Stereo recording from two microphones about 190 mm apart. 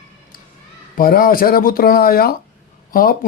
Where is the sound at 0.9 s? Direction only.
50° left (ahead or behind).